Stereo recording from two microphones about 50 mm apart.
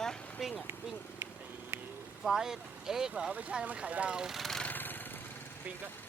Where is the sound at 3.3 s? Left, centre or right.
Right.